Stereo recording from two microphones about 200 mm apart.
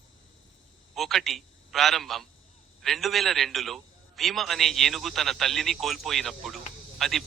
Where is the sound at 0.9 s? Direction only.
Centre (ahead or behind).